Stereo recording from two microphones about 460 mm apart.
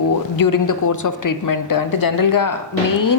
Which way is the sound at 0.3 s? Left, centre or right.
Left.